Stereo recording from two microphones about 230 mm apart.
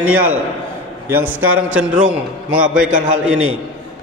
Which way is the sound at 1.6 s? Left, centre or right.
Right.